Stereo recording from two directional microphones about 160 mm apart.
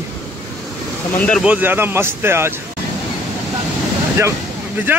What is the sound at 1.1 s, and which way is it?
Speech, 5° left (ahead or behind).